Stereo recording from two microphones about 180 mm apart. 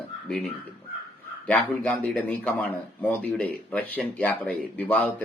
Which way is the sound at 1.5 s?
5° left (ahead or behind).